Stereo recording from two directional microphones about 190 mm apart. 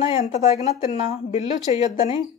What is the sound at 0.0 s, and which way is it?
Speech, 35° left (ahead or behind).